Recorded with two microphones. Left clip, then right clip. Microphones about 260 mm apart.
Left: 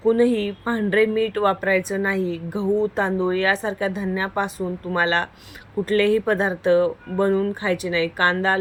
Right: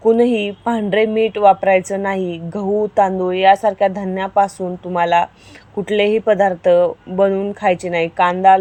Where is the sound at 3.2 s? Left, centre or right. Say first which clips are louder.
Right 8 dB; right.